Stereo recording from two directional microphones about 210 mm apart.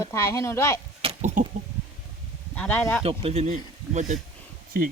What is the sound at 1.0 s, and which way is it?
Chicken, 35° right (ahead or behind).